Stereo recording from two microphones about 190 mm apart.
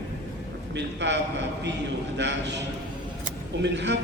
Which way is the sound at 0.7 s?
70° right (ahead or behind).